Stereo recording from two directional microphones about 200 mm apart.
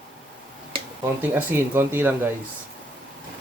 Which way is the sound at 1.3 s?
10° right (ahead or behind).